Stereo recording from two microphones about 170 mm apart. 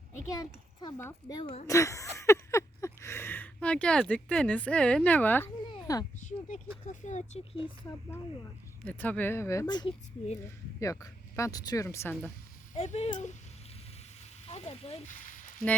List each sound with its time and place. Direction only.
0.3 s speech: 20° left (ahead or behind)
1.6 s speech: 20° left (ahead or behind)
2.1 s a sound: 15° left (ahead or behind)
6.1 s speech: 45° left (ahead or behind)
8.8 s speech: 10° left (ahead or behind)
12.7 s speech: 40° left (ahead or behind)
14.4 s speech: 35° left (ahead or behind)